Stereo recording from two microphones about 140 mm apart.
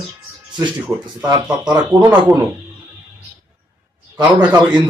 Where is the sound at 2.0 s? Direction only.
15° right (ahead or behind).